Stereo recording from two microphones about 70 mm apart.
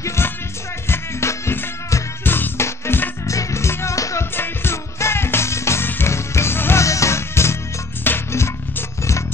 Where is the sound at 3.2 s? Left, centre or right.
Left.